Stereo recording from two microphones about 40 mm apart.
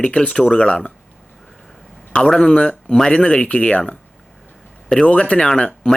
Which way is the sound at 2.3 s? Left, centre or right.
Centre.